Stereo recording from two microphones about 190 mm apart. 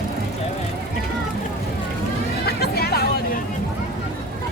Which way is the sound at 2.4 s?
55° left (ahead or behind).